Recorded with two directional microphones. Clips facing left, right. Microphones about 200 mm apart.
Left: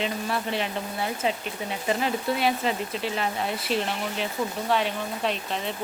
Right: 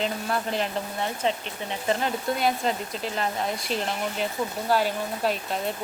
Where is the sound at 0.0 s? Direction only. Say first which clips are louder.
Right 1 dB; centre (ahead or behind).